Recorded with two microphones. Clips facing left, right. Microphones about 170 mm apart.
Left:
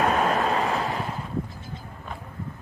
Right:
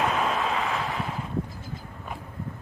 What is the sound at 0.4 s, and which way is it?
Vehicle, 40° left (ahead or behind).